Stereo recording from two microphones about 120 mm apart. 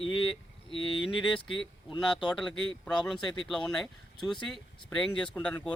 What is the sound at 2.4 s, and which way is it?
Speech, 5° left (ahead or behind).